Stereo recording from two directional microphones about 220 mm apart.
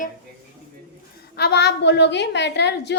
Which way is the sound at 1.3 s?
50° left (ahead or behind).